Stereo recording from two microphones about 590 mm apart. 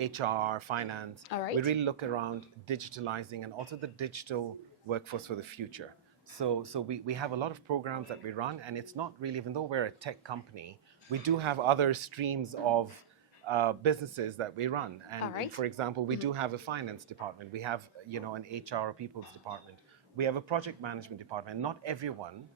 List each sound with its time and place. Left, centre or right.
0.0 s speech: right
1.3 s speech: left
1.5 s speech: right